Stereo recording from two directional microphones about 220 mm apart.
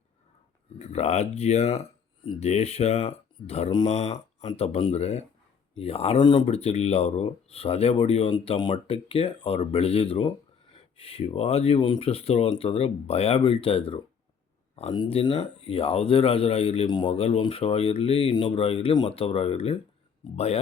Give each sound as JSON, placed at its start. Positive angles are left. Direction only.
{"t": 0.8, "sound": "speech", "side_deg": 30}